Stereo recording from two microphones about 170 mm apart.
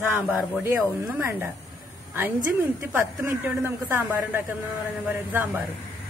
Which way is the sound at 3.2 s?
10° right (ahead or behind).